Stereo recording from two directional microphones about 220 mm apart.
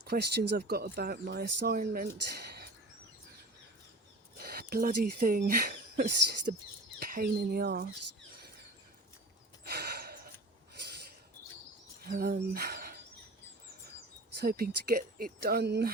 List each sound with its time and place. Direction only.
0.0 s speech: 45° right (ahead or behind)
4.4 s speech: 45° right (ahead or behind)
9.6 s gasp: 45° right (ahead or behind)
12.0 s speech: 45° right (ahead or behind)
14.4 s speech: 40° right (ahead or behind)